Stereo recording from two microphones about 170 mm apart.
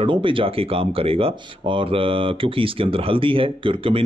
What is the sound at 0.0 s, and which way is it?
Speech, 30° right (ahead or behind).